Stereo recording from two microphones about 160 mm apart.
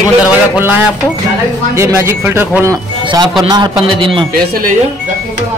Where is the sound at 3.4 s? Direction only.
25° right (ahead or behind).